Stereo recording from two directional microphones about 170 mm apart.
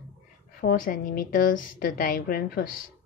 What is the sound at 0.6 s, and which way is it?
A woman's voice, 55° left (ahead or behind).